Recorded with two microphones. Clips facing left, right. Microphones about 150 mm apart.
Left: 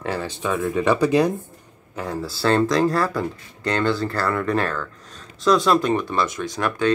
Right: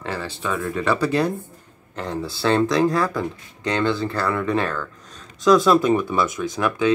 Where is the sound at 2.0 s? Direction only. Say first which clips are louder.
Even; 5° left (ahead or behind).